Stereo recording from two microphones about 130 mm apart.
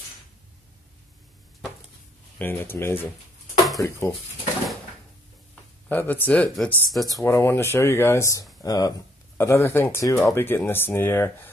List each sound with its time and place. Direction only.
2.3 s speech: 15° left (ahead or behind)
3.5 s a sound: centre (ahead or behind)
5.9 s speech: 15° left (ahead or behind)
7.2 s speech: 20° left (ahead or behind)